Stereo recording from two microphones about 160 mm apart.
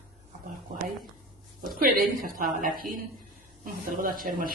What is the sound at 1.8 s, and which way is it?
A woman's voice, 60° right (ahead or behind).